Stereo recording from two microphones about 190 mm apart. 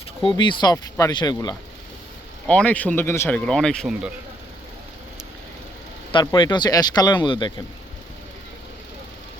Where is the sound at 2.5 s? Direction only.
5° left (ahead or behind).